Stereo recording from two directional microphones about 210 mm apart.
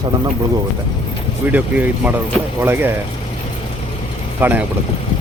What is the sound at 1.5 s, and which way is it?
Speech, 10° right (ahead or behind).